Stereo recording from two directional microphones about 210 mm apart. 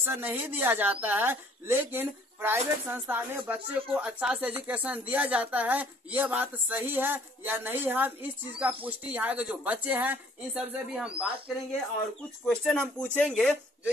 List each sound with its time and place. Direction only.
0.0 s speech: 10° right (ahead or behind)